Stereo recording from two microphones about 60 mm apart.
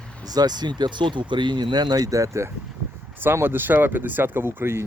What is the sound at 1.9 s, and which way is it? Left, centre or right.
Speech, right.